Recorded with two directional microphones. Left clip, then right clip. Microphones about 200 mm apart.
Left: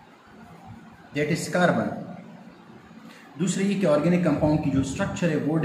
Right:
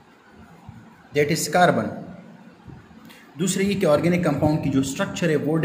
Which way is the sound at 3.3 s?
50° right (ahead or behind).